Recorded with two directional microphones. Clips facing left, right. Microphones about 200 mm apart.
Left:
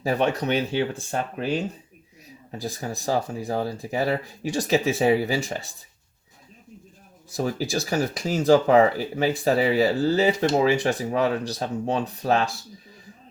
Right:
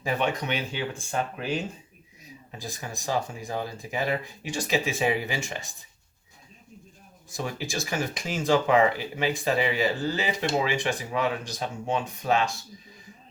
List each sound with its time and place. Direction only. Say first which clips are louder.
0.0 s speech: left 4 dB; 35° left (ahead or behind)
7.3 s speech: left 6 dB; 40° left (ahead or behind)